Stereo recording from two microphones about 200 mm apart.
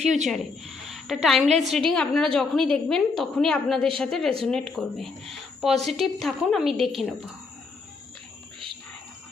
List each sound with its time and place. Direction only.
0.3 s a woman's voice: centre (ahead or behind)